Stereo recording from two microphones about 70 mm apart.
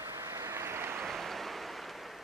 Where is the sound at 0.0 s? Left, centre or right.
Right.